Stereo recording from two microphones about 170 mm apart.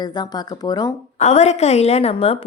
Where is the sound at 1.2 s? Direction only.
40° left (ahead or behind).